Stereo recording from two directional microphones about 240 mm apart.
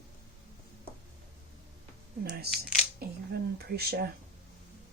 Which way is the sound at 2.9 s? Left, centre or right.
Right.